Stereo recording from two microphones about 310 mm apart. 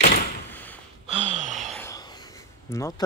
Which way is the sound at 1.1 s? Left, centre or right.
Right.